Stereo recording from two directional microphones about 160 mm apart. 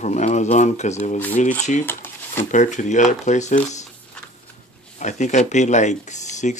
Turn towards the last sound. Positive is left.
turn(degrees=45)  # may be behind; listen again after turning